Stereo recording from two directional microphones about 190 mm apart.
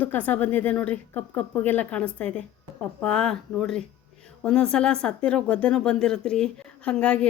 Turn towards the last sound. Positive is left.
turn(degrees=5)  # may be behind; listen again after turning